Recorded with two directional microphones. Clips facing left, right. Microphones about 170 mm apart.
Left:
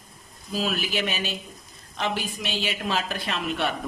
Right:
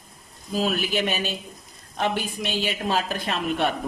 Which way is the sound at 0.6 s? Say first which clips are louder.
Right 3 dB; 45° right (ahead or behind).